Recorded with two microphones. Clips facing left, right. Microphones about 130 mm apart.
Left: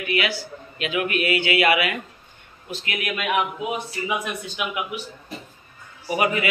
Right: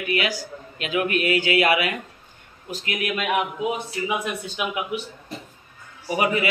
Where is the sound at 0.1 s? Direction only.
40° right (ahead or behind).